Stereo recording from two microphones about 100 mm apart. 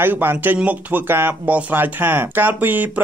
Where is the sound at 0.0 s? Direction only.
20° right (ahead or behind).